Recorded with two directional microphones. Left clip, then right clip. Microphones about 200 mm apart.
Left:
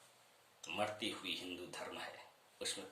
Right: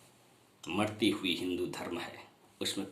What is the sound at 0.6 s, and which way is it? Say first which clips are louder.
Speech: right 9 dB; 15° left (ahead or behind).